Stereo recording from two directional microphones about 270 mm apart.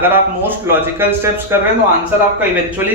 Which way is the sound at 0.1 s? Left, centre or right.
Centre.